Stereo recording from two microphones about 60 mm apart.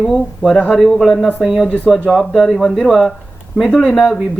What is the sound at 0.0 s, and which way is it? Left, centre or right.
Speech, centre.